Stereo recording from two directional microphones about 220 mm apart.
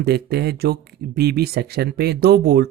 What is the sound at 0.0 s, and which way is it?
Speech, 45° right (ahead or behind).